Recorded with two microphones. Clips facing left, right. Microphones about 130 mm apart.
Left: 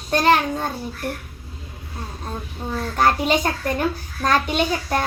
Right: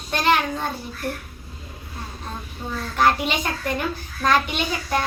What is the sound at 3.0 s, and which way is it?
A child's voice, 40° left (ahead or behind).